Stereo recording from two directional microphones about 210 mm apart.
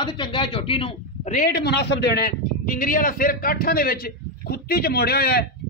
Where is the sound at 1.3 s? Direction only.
45° left (ahead or behind).